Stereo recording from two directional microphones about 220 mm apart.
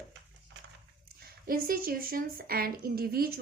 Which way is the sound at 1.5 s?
40° right (ahead or behind).